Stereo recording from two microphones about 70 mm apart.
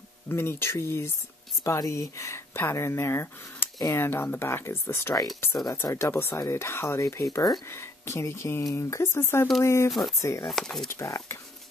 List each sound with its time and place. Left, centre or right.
0.3 s speech: left
5.9 s speech: left
9.8 s speech: centre
10.2 s speech: left
10.5 s speech: centre
10.9 s speech: left